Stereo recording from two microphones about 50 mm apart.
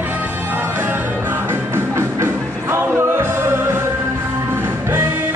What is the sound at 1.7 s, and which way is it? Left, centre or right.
Music, right.